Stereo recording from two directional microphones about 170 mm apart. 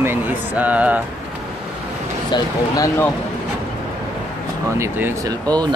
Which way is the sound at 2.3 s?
20° left (ahead or behind).